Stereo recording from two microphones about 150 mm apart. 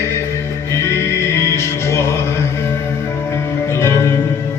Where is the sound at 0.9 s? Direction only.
20° left (ahead or behind).